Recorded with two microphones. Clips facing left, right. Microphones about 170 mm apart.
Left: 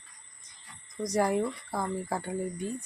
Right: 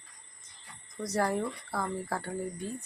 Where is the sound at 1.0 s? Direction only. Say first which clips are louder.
Left 3 dB; 15° left (ahead or behind).